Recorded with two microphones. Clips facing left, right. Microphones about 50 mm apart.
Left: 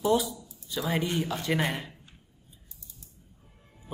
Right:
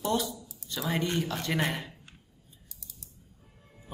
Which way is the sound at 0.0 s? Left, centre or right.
Centre.